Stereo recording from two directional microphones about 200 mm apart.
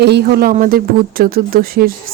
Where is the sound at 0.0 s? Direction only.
55° right (ahead or behind).